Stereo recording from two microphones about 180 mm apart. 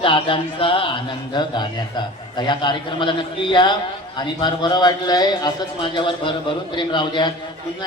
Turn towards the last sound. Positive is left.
turn(degrees=25)  # may be behind; listen again after turning